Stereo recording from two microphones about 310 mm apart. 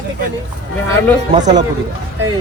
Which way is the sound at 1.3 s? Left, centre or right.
Right.